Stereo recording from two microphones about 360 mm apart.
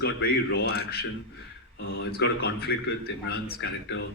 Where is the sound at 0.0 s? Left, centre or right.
Left.